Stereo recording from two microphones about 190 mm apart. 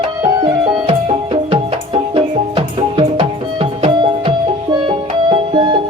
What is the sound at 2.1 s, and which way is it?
Music, 30° right (ahead or behind).